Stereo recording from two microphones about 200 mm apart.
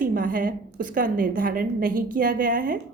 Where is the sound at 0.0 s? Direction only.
45° right (ahead or behind).